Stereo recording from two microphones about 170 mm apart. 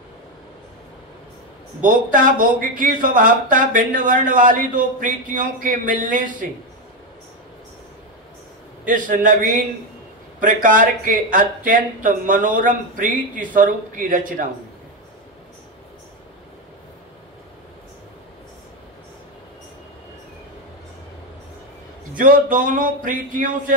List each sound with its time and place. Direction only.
1.8 s speech: 50° right (ahead or behind)
8.8 s speech: 50° right (ahead or behind)
22.1 s speech: 50° right (ahead or behind)